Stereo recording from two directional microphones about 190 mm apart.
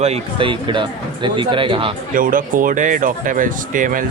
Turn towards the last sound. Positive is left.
turn(degrees=-45)  # may be behind; listen again after turning